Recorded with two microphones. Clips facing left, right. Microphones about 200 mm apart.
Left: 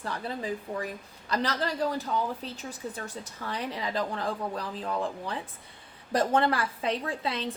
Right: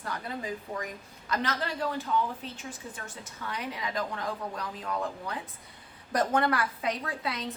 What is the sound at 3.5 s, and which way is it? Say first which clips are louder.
A woman's voice: left 3 dB; 35° left (ahead or behind).